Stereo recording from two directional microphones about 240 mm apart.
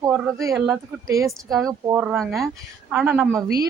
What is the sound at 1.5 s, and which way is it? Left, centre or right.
Speech, centre.